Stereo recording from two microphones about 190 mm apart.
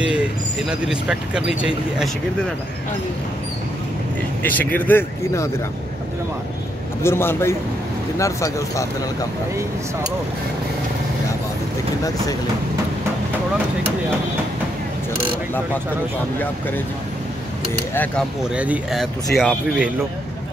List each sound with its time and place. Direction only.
0.7 s speech: 5° right (ahead or behind)
4.4 s speech: 10° left (ahead or behind)
7.0 s speech: 15° left (ahead or behind)
17.9 s speech: 10° left (ahead or behind)
18.5 s speech: 5° right (ahead or behind)